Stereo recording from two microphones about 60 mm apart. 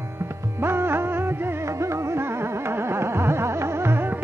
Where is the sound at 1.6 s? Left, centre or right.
Right.